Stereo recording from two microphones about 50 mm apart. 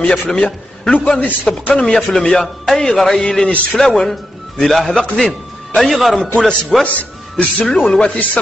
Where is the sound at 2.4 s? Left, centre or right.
Centre.